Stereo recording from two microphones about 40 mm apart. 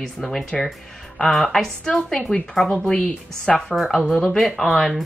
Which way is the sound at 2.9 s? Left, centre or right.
Centre.